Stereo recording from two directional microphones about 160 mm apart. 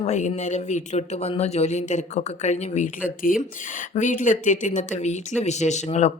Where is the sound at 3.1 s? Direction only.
60° left (ahead or behind).